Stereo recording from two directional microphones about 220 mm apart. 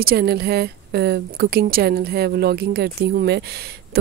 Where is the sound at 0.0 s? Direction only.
45° right (ahead or behind).